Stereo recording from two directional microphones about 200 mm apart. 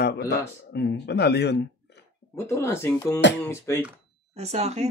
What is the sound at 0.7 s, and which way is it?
Speech, 55° left (ahead or behind).